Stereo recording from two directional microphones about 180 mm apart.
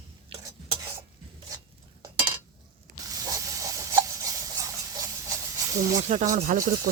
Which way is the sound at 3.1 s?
20° right (ahead or behind).